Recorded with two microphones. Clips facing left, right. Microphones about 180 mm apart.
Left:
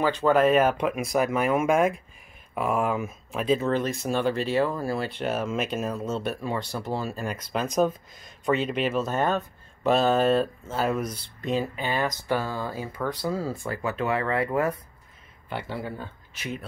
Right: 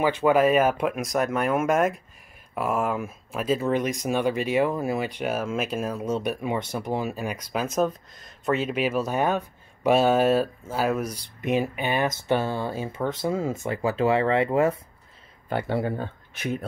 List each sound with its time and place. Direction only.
0.2 s speech: 10° right (ahead or behind); by 14.8 s 25° right (ahead or behind)
15.5 s speech: 60° right (ahead or behind)